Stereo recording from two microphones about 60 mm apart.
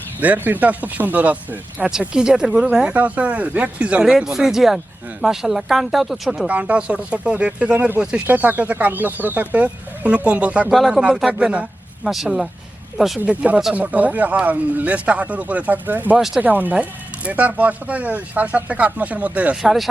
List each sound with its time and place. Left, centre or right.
0.2 s speech: right
1.9 s speech: centre
2.9 s speech: right; by 6.5 s centre
6.5 s speech: right
8.3 s speech: right
10.7 s speech: centre
11.3 s speech: right
12.0 s speech: centre
13.2 s speech: right
19.6 s speech: centre